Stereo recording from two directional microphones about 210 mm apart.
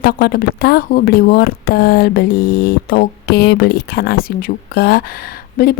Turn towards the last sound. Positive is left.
turn(degrees=40)  # may be behind; listen again after turning